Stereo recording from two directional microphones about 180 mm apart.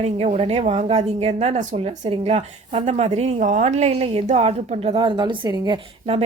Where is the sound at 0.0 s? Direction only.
35° right (ahead or behind).